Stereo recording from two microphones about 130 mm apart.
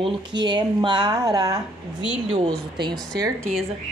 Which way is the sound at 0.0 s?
35° right (ahead or behind).